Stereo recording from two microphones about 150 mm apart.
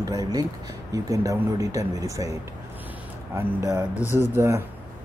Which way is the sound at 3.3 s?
15° right (ahead or behind).